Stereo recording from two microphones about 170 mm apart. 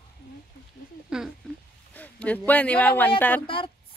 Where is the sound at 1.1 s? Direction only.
5° right (ahead or behind).